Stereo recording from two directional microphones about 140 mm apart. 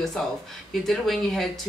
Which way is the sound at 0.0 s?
5° left (ahead or behind).